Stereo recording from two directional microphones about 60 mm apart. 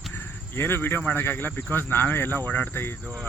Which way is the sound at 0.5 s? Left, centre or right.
Left.